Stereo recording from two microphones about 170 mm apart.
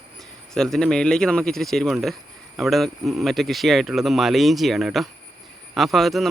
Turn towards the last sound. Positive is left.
turn(degrees=0)  # may be behind; listen again after turning